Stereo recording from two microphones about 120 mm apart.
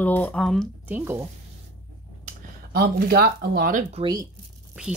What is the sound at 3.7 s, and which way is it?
Speech, 90° right.